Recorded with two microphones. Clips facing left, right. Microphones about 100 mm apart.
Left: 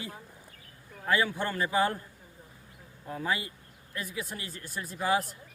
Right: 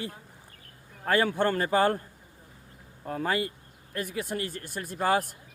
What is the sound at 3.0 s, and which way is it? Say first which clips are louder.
A man's voice: right 4 dB; 55° right (ahead or behind).